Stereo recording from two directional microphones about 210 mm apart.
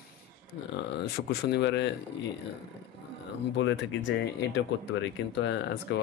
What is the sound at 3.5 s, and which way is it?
Speech, 60° left (ahead or behind).